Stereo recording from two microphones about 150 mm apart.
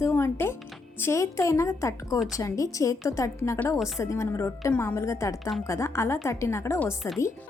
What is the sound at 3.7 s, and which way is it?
Speech, centre (ahead or behind).